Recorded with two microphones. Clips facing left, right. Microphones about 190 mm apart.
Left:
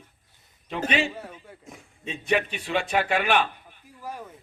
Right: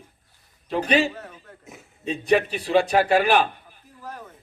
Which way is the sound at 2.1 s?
35° right (ahead or behind).